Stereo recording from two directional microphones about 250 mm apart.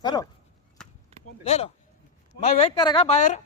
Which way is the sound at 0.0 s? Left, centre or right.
Centre.